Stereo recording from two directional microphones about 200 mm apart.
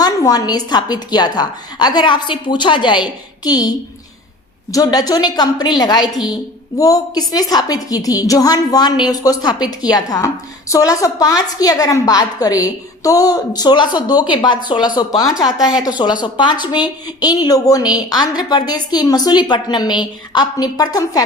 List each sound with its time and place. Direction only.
0.0 s a woman's voice: 20° left (ahead or behind)